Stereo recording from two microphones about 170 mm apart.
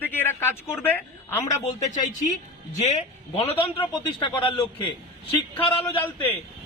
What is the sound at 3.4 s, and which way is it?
A man's voice, 30° left (ahead or behind).